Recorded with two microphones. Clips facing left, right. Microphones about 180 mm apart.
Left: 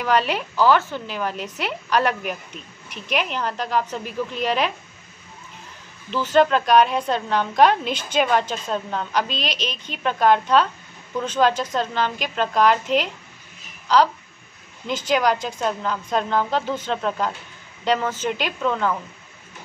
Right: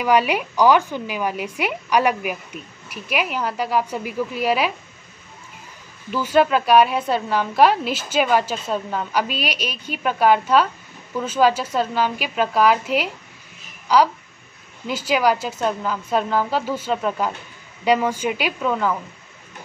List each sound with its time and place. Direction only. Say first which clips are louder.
0.0 s a woman's voice: right 3 dB; 10° right (ahead or behind)
6.0 s a woman's voice: even; 10° right (ahead or behind)